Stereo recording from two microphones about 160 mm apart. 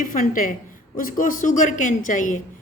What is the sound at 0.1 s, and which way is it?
Speech, 55° left (ahead or behind).